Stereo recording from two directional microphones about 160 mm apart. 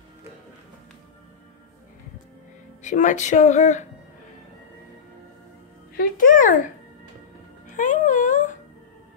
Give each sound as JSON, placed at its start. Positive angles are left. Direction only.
{"t": 2.8, "sound": "speech", "side_deg": 50}
{"t": 5.9, "sound": "a child's voice", "side_deg": 55}